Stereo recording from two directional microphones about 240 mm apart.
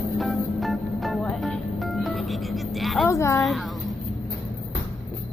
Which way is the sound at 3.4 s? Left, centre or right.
Centre.